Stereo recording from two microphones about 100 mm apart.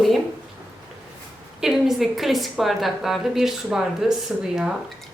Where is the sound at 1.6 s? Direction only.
5° right (ahead or behind).